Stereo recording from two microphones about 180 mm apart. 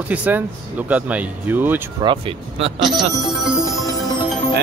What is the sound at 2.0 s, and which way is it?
Speech, 30° right (ahead or behind).